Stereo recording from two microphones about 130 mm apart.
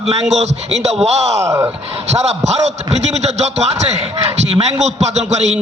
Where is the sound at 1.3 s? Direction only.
20° right (ahead or behind).